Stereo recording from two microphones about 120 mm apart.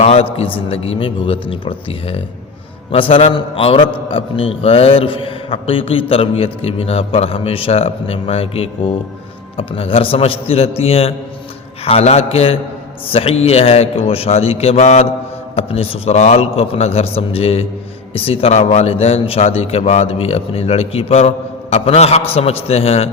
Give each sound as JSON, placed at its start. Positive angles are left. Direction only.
{"t": 0.0, "sound": "a man's voice", "side_deg": 55}
{"t": 15.5, "sound": "a man's voice", "side_deg": 55}